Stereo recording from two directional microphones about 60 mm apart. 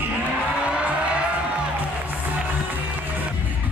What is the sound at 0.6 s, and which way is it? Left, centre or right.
Music, centre.